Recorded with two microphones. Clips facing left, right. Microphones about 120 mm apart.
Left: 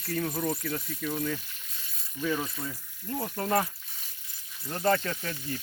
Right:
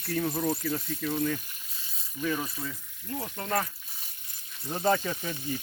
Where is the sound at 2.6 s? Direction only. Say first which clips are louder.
Left 1 dB; 10° left (ahead or behind).